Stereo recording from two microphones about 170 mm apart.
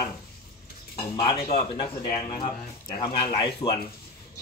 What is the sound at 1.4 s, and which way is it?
Speech, 30° left (ahead or behind).